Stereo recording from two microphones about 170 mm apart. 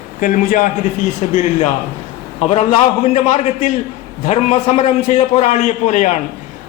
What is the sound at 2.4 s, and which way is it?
A man's voice, 40° left (ahead or behind).